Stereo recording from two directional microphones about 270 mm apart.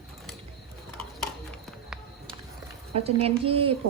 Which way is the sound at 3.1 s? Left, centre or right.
Right.